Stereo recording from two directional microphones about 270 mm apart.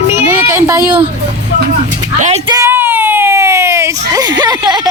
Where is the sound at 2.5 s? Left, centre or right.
Centre.